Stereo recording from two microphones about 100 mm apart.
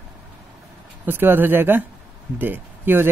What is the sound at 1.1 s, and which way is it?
Speech, 20° right (ahead or behind).